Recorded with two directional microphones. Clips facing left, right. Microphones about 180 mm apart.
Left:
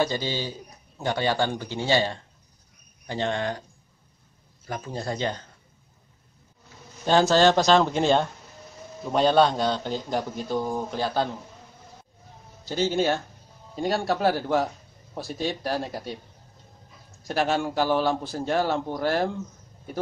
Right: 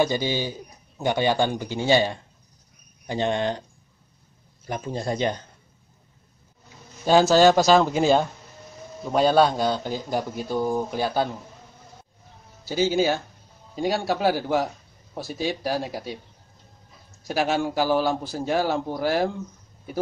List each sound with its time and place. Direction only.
0.0 s a man's voice: 15° right (ahead or behind)
4.6 s speech: 20° right (ahead or behind)
7.1 s a man's voice: 10° right (ahead or behind)
12.6 s a man's voice: 5° right (ahead or behind)
17.3 s a man's voice: 5° right (ahead or behind)